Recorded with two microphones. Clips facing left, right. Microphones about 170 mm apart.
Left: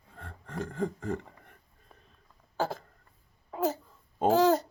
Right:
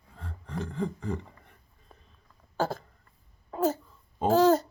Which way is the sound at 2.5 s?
15° left (ahead or behind).